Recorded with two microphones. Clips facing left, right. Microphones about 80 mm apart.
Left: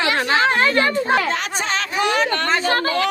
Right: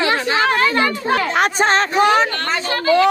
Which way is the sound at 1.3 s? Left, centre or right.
Right.